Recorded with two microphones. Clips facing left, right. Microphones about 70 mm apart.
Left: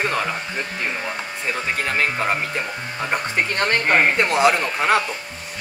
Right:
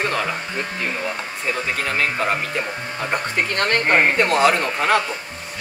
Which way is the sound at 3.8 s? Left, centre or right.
Centre.